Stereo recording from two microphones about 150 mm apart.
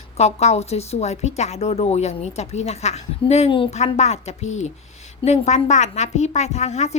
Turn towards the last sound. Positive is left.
turn(degrees=50)  # may be behind; listen again after turning